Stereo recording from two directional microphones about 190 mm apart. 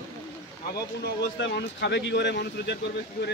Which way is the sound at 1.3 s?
65° left (ahead or behind).